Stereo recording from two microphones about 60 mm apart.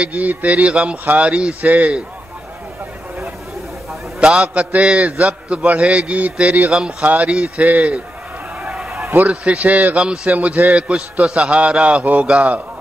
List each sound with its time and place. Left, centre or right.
0.0 s a man's voice: right
4.2 s a man's voice: centre
8.6 s a sound: centre
9.0 s a man's voice: right